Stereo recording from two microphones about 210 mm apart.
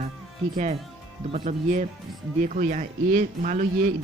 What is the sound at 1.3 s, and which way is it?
A man's voice, 30° right (ahead or behind).